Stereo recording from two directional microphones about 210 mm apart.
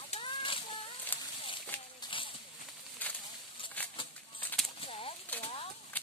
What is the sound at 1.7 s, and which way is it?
Clip-clop, 5° left (ahead or behind).